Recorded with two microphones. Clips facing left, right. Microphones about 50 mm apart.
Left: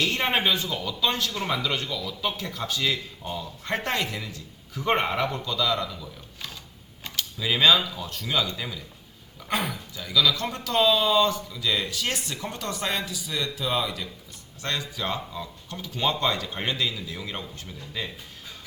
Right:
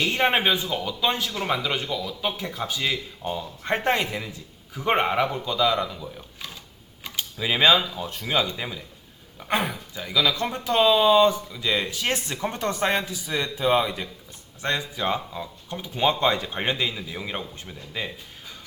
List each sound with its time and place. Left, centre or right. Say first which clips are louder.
0.0 s speech: right 3 dB; centre